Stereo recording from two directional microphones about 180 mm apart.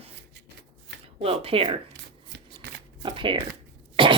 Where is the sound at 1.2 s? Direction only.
30° right (ahead or behind).